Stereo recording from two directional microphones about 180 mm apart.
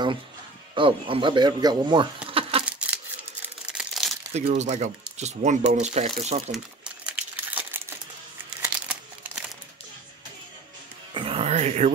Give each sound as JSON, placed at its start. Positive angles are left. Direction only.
{"t": 0.7, "sound": "speech", "side_deg": -30}
{"t": 2.2, "sound": "a sound", "side_deg": -30}
{"t": 3.4, "sound": "crumpling", "side_deg": -5}
{"t": 4.3, "sound": "speech", "side_deg": -35}
{"t": 7.1, "sound": "crumpling", "side_deg": -10}
{"t": 11.1, "sound": "music", "side_deg": -30}